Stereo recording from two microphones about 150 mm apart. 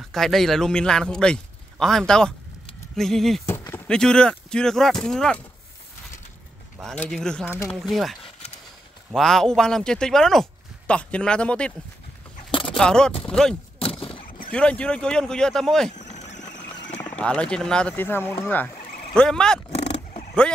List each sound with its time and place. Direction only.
0.1 s speech: centre (ahead or behind)
3.4 s speech: 15° left (ahead or behind)
6.8 s speech: centre (ahead or behind)
12.4 s a sound: 35° left (ahead or behind)
12.7 s speech: 5° left (ahead or behind)
13.7 s a sound: 40° left (ahead or behind)
14.5 s speech: 5° left (ahead or behind)
16.0 s vehicle: 50° left (ahead or behind)
17.1 s speech: 5° left (ahead or behind)
19.7 s roaring cats: 45° left (ahead or behind)